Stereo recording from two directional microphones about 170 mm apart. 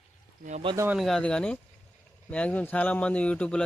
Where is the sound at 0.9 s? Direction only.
Centre (ahead or behind).